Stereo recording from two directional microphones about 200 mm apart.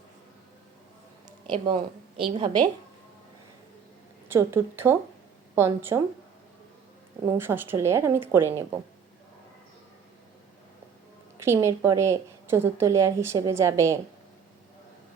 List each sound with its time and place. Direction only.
1.5 s a woman's voice: 25° right (ahead or behind)
4.3 s a woman's voice: 10° right (ahead or behind)
7.3 s a woman's voice: 10° right (ahead or behind)
11.3 s a woman's voice: 15° right (ahead or behind)